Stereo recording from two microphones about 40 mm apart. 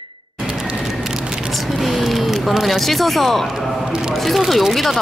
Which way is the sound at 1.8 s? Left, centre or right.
Centre.